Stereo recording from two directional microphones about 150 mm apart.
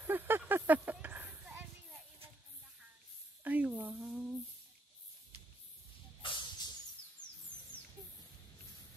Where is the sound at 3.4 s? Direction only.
10° right (ahead or behind).